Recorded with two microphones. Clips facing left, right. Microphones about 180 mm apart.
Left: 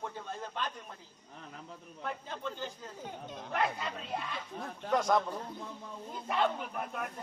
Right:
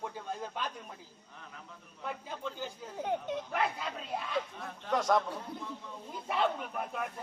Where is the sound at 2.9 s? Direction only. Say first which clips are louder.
Right 9 dB; 65° right (ahead or behind).